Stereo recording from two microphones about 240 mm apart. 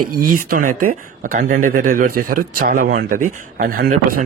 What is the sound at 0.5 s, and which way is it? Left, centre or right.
Speech, right.